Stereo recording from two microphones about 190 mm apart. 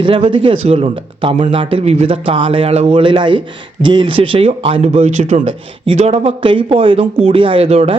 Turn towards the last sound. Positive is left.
turn(degrees=-30)  # may be behind; listen again after turning